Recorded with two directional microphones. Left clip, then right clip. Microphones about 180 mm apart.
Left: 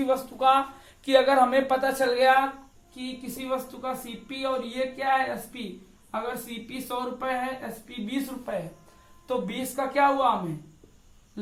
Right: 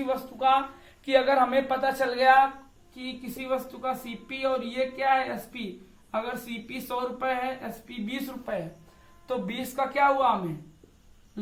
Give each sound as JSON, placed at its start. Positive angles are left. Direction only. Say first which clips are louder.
{"t": 0.0, "sound": "a woman's voice", "louder": "left 3 dB", "side_deg": 30}
{"t": 2.9, "sound": "speech", "louder": "left 1 dB", "side_deg": 5}